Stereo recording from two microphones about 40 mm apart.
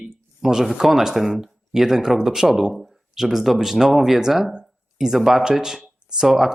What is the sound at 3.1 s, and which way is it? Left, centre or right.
Speech, centre.